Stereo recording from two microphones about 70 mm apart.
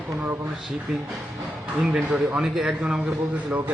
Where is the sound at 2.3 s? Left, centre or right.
Centre; by 3.7 s right.